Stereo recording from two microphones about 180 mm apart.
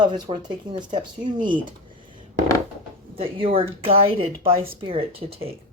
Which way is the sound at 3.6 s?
30° right (ahead or behind).